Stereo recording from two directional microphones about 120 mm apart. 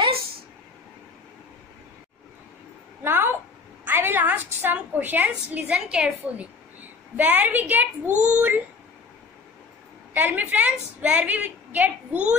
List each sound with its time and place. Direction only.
3.0 s a sound: 20° right (ahead or behind)
3.8 s a woman's voice: 15° right (ahead or behind)
10.1 s a woman's voice: 15° right (ahead or behind)